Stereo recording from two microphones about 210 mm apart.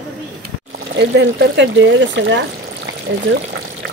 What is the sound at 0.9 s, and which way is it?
Speech, 55° right (ahead or behind).